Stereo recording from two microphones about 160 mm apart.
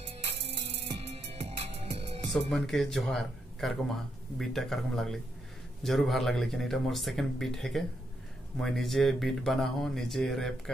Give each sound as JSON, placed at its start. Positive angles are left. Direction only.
{"t": 0.0, "sound": "music", "side_deg": -40}
{"t": 2.5, "sound": "speech", "side_deg": 0}